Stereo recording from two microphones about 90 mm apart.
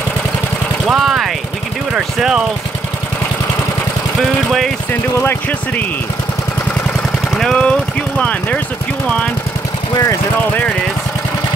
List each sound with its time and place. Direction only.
0.8 s vehicle: 5° right (ahead or behind)
2.0 s speech: 10° right (ahead or behind)
4.5 s speech: centre (ahead or behind)
5.2 s speech: 20° left (ahead or behind)
7.3 s speech: 10° left (ahead or behind)